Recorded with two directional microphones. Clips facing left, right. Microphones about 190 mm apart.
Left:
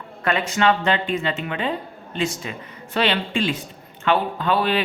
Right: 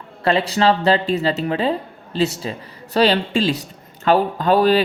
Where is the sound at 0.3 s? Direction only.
35° right (ahead or behind).